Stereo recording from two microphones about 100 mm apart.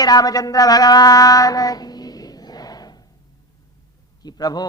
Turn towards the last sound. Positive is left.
turn(degrees=40)  # may be behind; listen again after turning